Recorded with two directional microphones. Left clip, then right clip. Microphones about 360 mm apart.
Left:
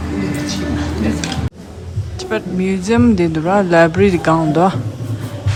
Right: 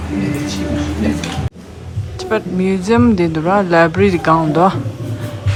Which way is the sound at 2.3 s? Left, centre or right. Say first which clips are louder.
Right 2 dB; centre.